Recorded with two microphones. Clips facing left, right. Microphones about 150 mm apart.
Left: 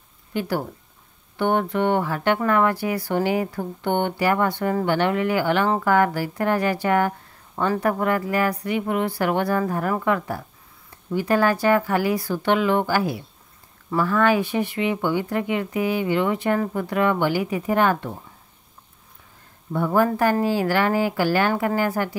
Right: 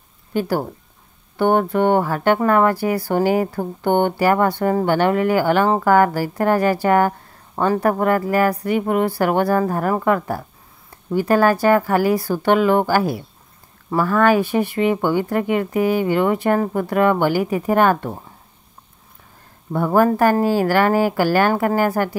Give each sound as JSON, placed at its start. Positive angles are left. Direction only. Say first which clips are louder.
{"t": 0.3, "sound": "speech", "louder": "right 4 dB", "side_deg": -40}
{"t": 19.7, "sound": "speech", "louder": "right 4 dB", "side_deg": -50}